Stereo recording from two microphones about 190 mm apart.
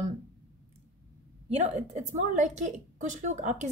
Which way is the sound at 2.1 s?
40° right (ahead or behind).